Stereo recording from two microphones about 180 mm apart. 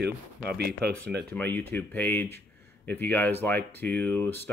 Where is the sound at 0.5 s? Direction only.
60° right (ahead or behind).